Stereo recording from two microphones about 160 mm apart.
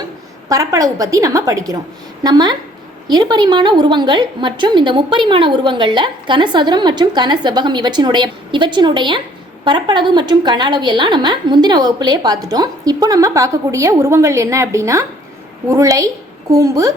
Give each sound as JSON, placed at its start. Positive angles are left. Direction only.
{"t": 0.4, "sound": "a woman's voice", "side_deg": -20}